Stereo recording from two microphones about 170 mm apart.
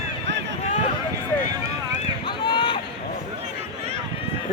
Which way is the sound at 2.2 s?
30° left (ahead or behind).